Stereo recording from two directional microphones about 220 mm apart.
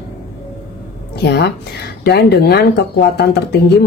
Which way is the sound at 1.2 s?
45° left (ahead or behind).